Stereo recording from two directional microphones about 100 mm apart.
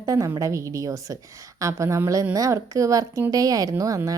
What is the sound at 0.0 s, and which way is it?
A woman's voice, 35° right (ahead or behind).